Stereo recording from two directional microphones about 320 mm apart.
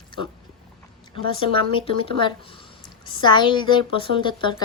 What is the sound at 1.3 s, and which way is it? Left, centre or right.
Speech, centre.